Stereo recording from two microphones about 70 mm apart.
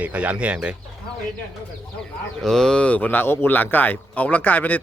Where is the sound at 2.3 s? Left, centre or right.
Centre.